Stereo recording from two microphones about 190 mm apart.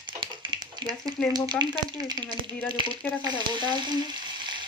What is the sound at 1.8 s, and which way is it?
Speech, 20° right (ahead or behind).